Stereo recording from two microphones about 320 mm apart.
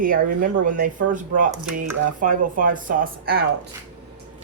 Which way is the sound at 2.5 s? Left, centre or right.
Right.